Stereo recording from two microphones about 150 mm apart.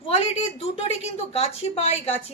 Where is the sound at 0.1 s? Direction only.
40° left (ahead or behind).